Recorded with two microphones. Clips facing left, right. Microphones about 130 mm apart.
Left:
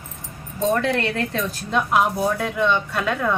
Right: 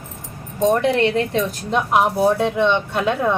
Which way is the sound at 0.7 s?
20° right (ahead or behind).